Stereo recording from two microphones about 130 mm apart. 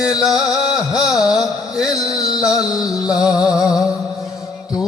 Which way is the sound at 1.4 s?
5° right (ahead or behind).